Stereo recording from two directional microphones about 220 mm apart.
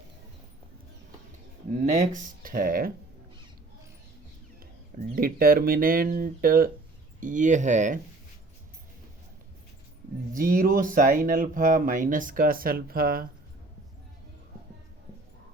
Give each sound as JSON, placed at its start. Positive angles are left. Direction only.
{"t": 1.8, "sound": "speech", "side_deg": -35}
{"t": 5.1, "sound": "speech", "side_deg": -40}
{"t": 10.3, "sound": "speech", "side_deg": -40}